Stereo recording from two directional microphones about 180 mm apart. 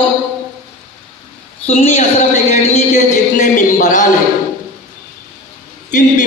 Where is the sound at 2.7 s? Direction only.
40° left (ahead or behind).